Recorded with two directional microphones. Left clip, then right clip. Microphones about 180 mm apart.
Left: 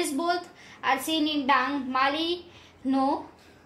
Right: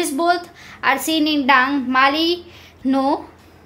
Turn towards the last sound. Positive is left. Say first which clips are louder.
# right 7 dB
turn(degrees=-25)  # may be behind; listen again after turning